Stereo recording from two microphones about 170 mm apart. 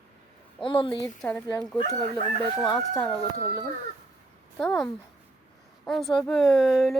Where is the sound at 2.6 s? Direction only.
20° left (ahead or behind).